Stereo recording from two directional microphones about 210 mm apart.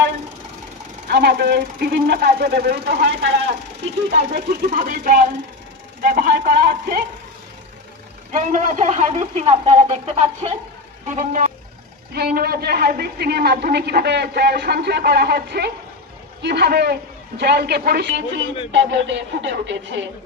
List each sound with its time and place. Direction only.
1.0 s speech: 50° right (ahead or behind)
4.3 s speech: 40° right (ahead or behind)
8.3 s speech: 35° right (ahead or behind)
12.1 s speech: 50° right (ahead or behind)